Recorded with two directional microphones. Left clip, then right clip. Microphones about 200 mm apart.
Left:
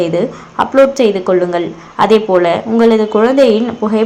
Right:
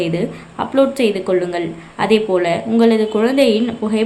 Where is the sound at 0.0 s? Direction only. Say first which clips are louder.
Left 6 dB; 5° left (ahead or behind).